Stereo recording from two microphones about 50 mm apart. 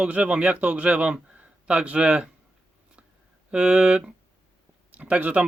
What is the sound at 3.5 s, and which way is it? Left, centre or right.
Speech, right.